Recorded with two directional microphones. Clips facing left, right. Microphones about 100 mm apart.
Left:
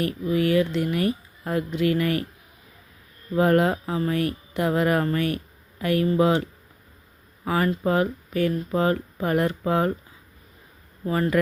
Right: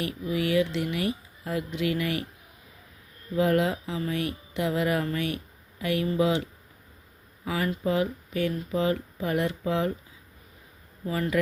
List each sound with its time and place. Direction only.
0.0 s speech: 45° left (ahead or behind)
3.3 s speech: 50° left (ahead or behind)
7.4 s speech: 45° left (ahead or behind)
11.0 s speech: 45° left (ahead or behind)